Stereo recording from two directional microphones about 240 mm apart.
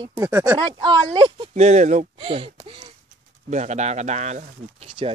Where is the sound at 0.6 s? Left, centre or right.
Centre.